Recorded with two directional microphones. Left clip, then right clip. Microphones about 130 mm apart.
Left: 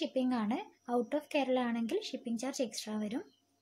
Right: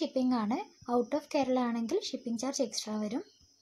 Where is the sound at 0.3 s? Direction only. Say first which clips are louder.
Right 3 dB; 30° right (ahead or behind).